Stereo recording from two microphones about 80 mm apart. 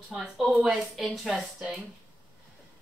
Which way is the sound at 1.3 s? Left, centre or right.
Centre.